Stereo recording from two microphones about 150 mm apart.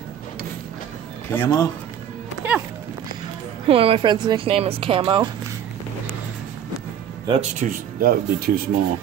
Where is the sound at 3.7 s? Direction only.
35° right (ahead or behind).